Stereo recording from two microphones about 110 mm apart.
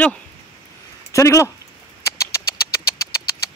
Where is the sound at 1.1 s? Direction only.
30° left (ahead or behind).